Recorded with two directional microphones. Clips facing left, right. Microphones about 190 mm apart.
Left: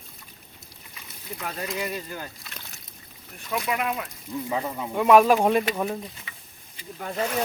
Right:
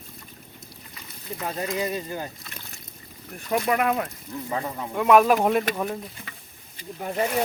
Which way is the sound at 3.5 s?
50° right (ahead or behind).